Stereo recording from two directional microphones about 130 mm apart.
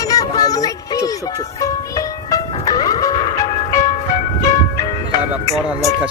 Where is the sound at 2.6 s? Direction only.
30° left (ahead or behind).